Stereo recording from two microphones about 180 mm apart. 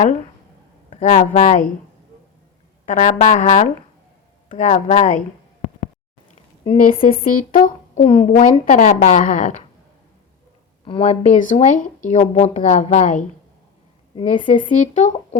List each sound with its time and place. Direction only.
0.0 s speech: 40° left (ahead or behind)
2.8 s speech: 40° left (ahead or behind)
6.7 s speech: 50° left (ahead or behind)
10.8 s speech: 35° left (ahead or behind)
14.5 s speech: 45° left (ahead or behind)